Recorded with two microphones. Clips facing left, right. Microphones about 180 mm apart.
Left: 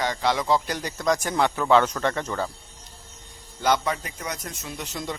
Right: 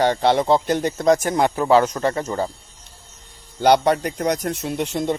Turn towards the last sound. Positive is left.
turn(degrees=-55)  # may be behind; listen again after turning